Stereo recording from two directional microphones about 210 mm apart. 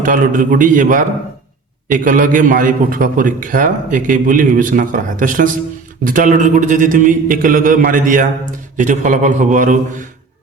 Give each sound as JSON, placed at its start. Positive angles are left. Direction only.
{"t": 0.0, "sound": "a man's voice", "side_deg": -40}